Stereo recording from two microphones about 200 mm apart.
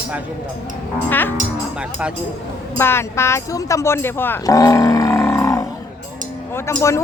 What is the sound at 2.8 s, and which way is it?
A woman's voice, 10° left (ahead or behind).